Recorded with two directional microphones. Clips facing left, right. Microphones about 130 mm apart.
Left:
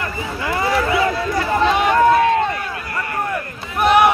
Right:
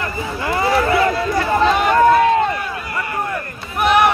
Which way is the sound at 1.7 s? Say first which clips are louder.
Right 1 dB; centre (ahead or behind).